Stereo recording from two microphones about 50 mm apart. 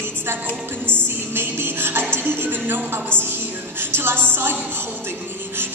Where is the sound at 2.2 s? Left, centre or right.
Right.